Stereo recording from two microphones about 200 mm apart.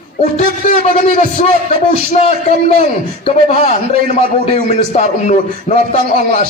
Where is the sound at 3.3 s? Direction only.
30° left (ahead or behind).